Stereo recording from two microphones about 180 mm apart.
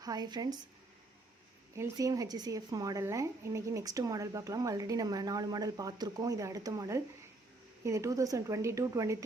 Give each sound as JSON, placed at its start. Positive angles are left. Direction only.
{"t": 0.0, "sound": "a woman's voice", "side_deg": -20}
{"t": 1.7, "sound": "a woman's voice", "side_deg": -15}